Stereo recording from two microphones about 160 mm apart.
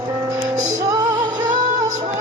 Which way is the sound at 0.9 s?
25° right (ahead or behind).